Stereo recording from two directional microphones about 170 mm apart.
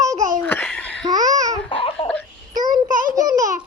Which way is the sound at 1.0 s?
20° right (ahead or behind).